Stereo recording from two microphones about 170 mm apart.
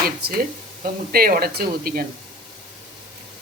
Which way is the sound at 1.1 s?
60° right (ahead or behind).